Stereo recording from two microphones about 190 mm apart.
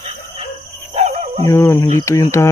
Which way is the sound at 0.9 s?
35° right (ahead or behind).